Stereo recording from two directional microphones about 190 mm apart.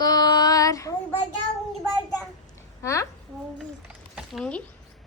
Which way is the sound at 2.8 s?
15° left (ahead or behind).